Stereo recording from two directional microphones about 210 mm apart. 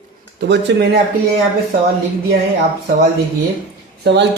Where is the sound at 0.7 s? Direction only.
55° right (ahead or behind).